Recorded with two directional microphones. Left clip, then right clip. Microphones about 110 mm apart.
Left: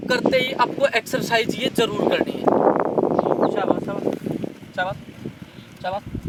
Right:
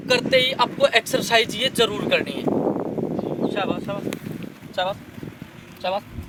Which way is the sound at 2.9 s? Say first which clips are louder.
Left 7 dB; 65° left (ahead or behind).